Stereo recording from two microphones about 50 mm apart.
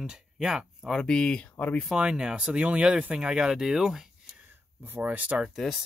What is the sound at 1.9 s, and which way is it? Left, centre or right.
Speech, centre.